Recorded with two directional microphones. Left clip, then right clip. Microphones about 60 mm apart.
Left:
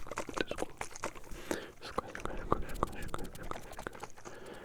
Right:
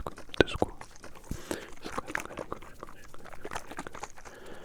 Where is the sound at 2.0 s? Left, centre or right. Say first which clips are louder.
Right 6 dB; right.